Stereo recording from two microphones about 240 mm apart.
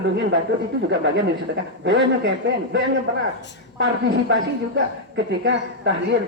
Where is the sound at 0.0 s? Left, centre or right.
Right.